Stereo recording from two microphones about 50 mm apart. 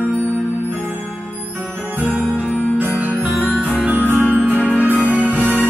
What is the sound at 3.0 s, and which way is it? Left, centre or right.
Music, right.